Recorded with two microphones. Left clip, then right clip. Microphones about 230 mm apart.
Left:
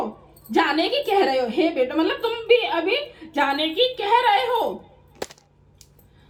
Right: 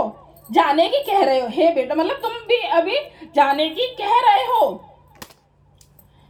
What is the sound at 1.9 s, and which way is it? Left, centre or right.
A woman's voice, right.